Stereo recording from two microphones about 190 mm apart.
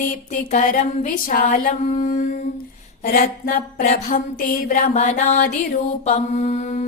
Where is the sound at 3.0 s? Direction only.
50° left (ahead or behind).